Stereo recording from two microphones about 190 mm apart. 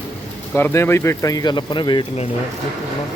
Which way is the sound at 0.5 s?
10° left (ahead or behind).